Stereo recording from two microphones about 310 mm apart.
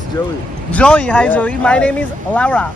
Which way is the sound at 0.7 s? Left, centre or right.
Centre.